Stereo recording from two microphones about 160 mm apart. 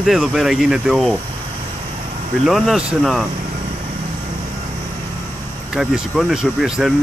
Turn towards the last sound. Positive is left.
turn(degrees=0)  # may be behind; listen again after turning